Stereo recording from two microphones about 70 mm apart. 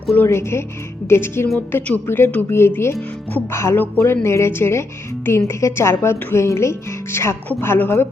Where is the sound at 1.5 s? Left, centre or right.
Left.